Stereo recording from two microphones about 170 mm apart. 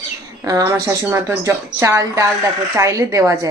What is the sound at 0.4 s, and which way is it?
A woman's voice, 20° right (ahead or behind).